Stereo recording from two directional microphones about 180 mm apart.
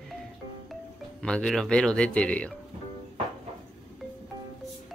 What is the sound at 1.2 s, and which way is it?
Speech, 5° left (ahead or behind).